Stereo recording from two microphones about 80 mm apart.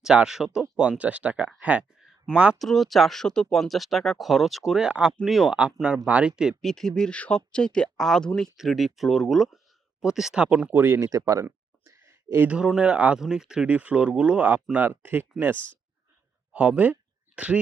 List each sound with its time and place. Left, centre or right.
0.0 s speech: centre
2.6 s speech: centre
4.9 s speech: centre
6.1 s speech: centre
6.6 s speech: centre
10.7 s speech: right
11.1 s speech: right
11.4 s a sound: right
12.5 s speech: centre; by 15.7 s right
16.5 s a sound: centre